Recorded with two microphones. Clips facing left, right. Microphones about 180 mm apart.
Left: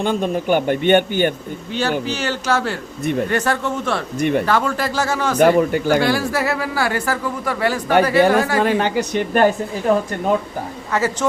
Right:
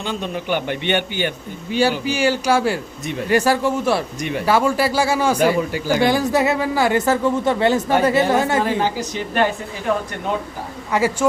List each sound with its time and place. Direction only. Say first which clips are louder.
0.0 s speech: left 6 dB; 50° left (ahead or behind)
1.7 s speech: right 3 dB; 10° right (ahead or behind)
3.0 s speech: left 6 dB; 55° left (ahead or behind)
3.2 s speech: right 3 dB; 10° right (ahead or behind)
4.2 s speech: left 7 dB; 55° left (ahead or behind)
4.4 s speech: right 2 dB; 10° right (ahead or behind)
5.5 s speech: left 4 dB; 55° left (ahead or behind)
6.0 s speech: right 2 dB; 20° right (ahead or behind)
8.6 s a woman's voice: left 3 dB; 65° left (ahead or behind)
9.3 s speech: left 4 dB; 45° left (ahead or behind)
10.9 s speech: right 2 dB; 15° right (ahead or behind)